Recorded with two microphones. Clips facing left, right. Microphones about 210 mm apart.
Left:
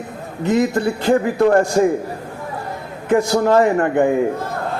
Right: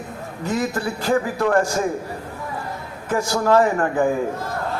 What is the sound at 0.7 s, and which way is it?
Speech, 25° left (ahead or behind).